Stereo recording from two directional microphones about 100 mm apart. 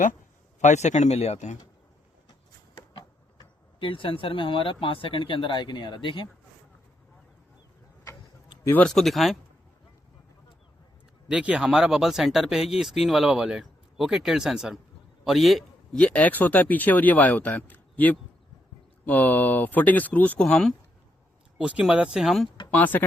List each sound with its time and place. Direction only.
1.1 s speech: 90° left
2.9 s speech: 50° left (ahead or behind)
8.8 s speech: 5° left (ahead or behind)
11.3 s speech: 10° right (ahead or behind)
15.2 s a sound: centre (ahead or behind)
16.0 s speech: 15° left (ahead or behind)
21.6 s speech: 10° right (ahead or behind)
22.7 s speech: 20° left (ahead or behind)